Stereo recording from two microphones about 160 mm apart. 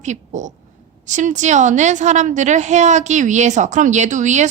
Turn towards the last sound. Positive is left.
turn(degrees=-50)  # may be behind; listen again after turning